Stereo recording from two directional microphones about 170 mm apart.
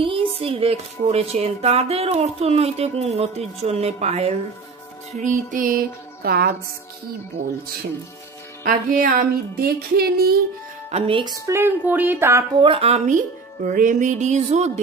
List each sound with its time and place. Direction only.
0.0 s music: 30° right (ahead or behind)
0.4 s speech: 35° right (ahead or behind)
5.1 s music: 50° right (ahead or behind); by 6.5 s 65° right (ahead or behind)
8.6 s music: 55° right (ahead or behind)
10.9 s speech: 35° right (ahead or behind)
11.4 s speech: 15° right (ahead or behind)
12.5 s speech: 30° right (ahead or behind)